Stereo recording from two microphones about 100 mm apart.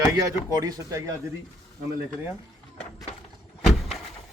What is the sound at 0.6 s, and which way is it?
Speech, 35° right (ahead or behind).